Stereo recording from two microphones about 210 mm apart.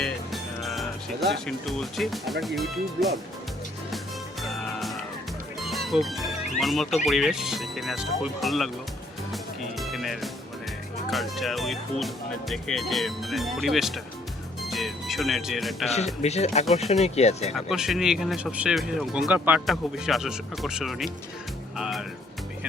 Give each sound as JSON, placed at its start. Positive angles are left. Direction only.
{"t": 0.0, "sound": "speech", "side_deg": 0}
{"t": 3.9, "sound": "music", "side_deg": 0}
{"t": 5.5, "sound": "speech", "side_deg": 0}
{"t": 9.3, "sound": "music", "side_deg": 0}
{"t": 11.1, "sound": "speech", "side_deg": 0}
{"t": 16.2, "sound": "speech", "side_deg": 30}
{"t": 17.5, "sound": "speech", "side_deg": 0}